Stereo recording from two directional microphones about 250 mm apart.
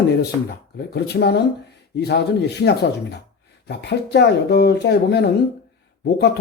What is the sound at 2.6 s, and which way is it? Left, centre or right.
Speech, left.